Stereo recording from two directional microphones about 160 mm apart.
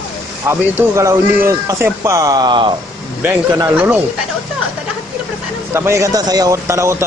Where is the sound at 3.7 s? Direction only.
10° right (ahead or behind).